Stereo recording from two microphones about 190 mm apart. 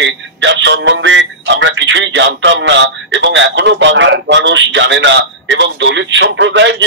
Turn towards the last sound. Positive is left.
turn(degrees=-70)  # may be behind; listen again after turning